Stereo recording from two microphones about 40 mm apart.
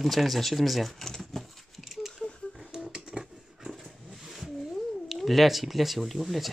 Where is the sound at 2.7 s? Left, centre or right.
Centre.